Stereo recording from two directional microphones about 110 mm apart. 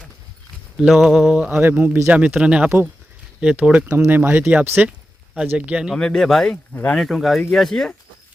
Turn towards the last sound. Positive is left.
turn(degrees=5)  # may be behind; listen again after turning